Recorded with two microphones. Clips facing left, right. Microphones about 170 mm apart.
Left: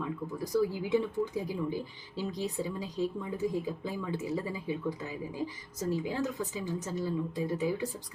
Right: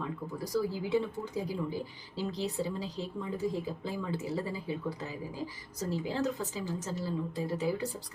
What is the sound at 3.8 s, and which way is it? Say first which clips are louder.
A woman's voice: left 1 dB; 15° left (ahead or behind).